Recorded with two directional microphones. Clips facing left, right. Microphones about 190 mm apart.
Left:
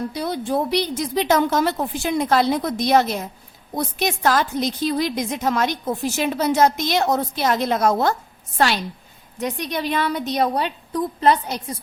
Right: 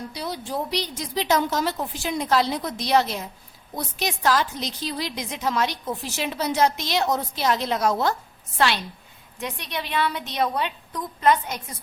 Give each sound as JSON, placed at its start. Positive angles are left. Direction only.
{"t": 0.1, "sound": "a woman's voice", "side_deg": 55}